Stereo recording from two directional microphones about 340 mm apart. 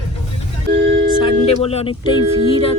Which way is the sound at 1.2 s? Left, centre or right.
Centre.